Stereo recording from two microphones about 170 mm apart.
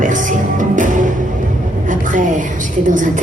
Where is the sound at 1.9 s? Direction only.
50° right (ahead or behind).